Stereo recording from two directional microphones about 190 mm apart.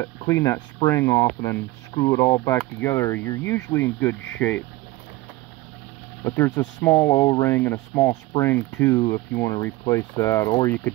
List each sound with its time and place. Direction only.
0.0 s speech: 15° left (ahead or behind)
6.2 s speech: 15° left (ahead or behind)